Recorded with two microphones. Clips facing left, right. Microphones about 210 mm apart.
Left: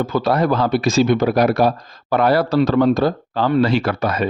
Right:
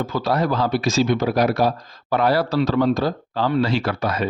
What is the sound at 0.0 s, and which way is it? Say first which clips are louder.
Speech: left 4 dB; 55° left (ahead or behind).